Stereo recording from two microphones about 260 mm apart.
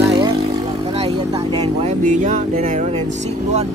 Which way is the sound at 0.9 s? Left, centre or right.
Right.